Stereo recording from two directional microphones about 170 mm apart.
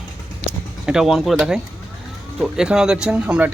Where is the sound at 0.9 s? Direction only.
5° right (ahead or behind).